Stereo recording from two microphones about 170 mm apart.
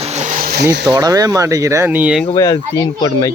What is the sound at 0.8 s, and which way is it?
Speech, 25° right (ahead or behind).